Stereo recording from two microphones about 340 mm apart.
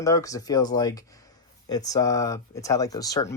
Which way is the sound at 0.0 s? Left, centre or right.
Centre.